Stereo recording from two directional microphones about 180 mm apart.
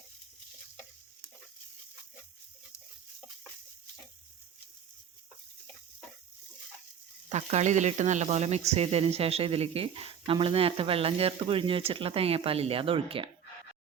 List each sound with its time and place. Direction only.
7.3 s speech: 40° right (ahead or behind)